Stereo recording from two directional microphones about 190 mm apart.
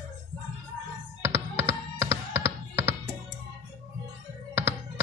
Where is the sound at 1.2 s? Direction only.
15° right (ahead or behind).